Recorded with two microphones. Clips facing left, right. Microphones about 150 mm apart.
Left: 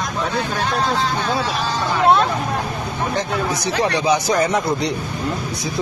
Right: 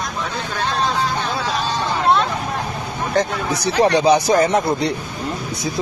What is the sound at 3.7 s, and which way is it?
Speech, 35° right (ahead or behind).